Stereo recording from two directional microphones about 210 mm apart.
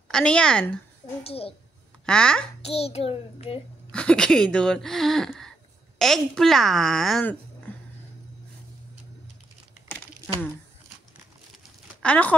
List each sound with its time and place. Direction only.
0.1 s speech: 5° left (ahead or behind)
1.2 s a child's voice: 30° left (ahead or behind)
2.0 s speech: 5° left (ahead or behind)
2.6 s a child's voice: 30° left (ahead or behind)
3.9 s speech: 5° left (ahead or behind)
9.8 s crumpling: 5° left (ahead or behind)
11.5 s a sound: 5° left (ahead or behind)